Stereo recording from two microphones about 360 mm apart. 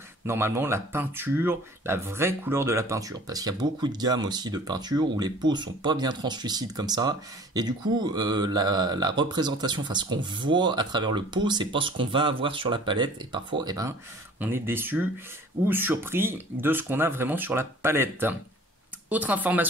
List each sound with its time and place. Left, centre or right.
0.3 s speech: centre